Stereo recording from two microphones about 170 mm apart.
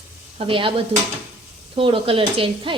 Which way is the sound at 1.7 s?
30° right (ahead or behind).